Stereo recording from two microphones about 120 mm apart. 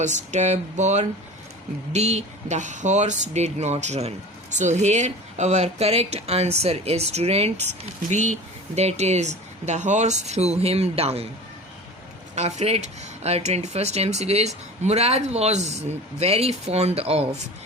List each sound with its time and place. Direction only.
0.0 s speech: 80° right
1.9 s speech: 70° right (ahead or behind)
4.5 s speech: 85° right; by 7.5 s 60° right (ahead or behind)
8.1 s speech: 75° right (ahead or behind); by 11.3 s 55° right (ahead or behind)
12.3 s speech: 70° right (ahead or behind)